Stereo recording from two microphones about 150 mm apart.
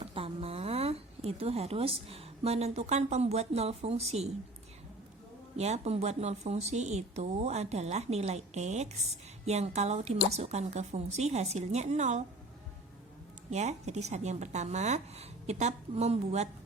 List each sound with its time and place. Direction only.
0.0 s a woman's voice: 40° right (ahead or behind)
5.5 s a woman's voice: 45° right (ahead or behind)
13.5 s a woman's voice: 50° right (ahead or behind)